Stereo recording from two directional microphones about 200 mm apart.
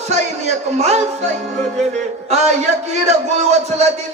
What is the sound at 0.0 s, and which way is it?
Music, 35° right (ahead or behind).